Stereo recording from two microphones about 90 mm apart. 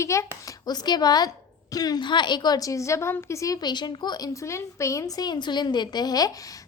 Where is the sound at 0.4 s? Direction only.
50° left (ahead or behind).